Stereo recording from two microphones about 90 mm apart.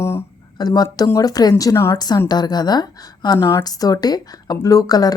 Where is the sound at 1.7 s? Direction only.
30° left (ahead or behind).